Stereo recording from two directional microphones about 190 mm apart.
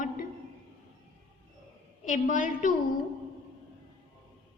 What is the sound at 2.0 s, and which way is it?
Speech, 45° left (ahead or behind).